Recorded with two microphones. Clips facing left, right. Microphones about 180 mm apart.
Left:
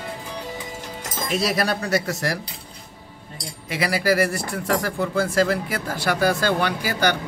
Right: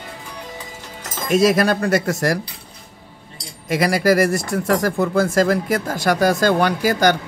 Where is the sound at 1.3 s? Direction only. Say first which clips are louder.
Right 8 dB; 45° right (ahead or behind).